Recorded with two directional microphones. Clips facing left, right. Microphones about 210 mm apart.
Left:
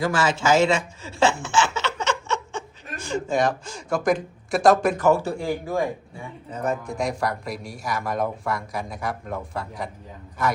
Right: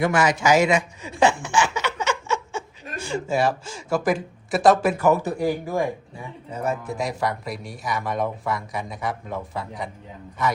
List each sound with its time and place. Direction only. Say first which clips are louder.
0.0 s a man's voice: right 2 dB; 20° right (ahead or behind)
1.2 s a sound: right 1 dB; 15° right (ahead or behind)
3.2 s a man's voice: right 1 dB; 5° right (ahead or behind)
5.0 s a man's voice: right 1 dB; 15° right (ahead or behind); by 10.5 s centre (ahead or behind)